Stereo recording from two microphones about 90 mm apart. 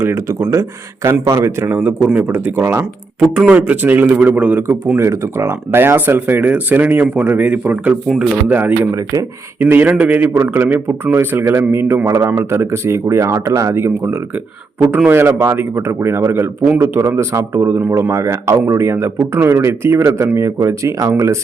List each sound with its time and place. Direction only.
0.0 s a man's voice: 30° right (ahead or behind)
3.2 s speech: 10° right (ahead or behind)
4.9 s a man's voice: 30° right (ahead or behind)